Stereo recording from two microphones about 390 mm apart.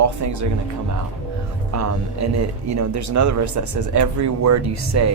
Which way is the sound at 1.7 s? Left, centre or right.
Right.